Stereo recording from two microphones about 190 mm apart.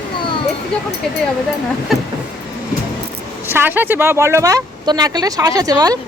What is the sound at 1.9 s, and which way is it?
Speech, centre (ahead or behind).